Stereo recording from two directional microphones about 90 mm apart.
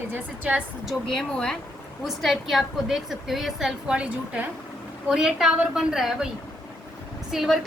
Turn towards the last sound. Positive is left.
turn(degrees=0)  # may be behind; listen again after turning